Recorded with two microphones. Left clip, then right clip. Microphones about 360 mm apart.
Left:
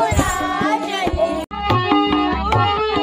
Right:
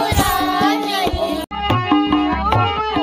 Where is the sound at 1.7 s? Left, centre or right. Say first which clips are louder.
Even; centre.